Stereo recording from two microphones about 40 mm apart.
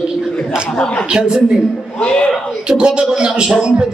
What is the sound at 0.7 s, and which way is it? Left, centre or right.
A man's voice, centre.